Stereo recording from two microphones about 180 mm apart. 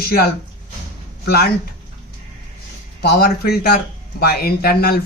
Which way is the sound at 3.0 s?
60° left (ahead or behind).